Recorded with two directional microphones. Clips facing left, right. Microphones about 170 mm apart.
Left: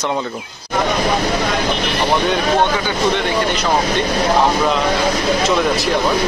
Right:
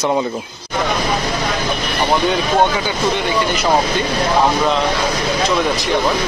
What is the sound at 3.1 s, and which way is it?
Speech, 5° right (ahead or behind).